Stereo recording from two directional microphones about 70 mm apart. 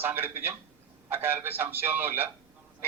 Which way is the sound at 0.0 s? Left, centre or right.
Right.